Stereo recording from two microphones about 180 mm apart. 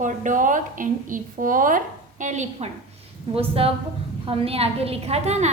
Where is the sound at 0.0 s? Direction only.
45° right (ahead or behind).